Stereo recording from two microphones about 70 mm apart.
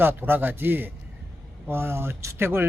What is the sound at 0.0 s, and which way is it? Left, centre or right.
Speech, right.